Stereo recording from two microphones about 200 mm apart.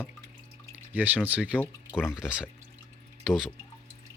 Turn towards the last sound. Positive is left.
turn(degrees=0)  # may be behind; listen again after turning